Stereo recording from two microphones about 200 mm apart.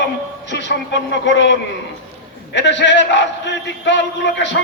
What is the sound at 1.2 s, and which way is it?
A man's voice, 65° left (ahead or behind).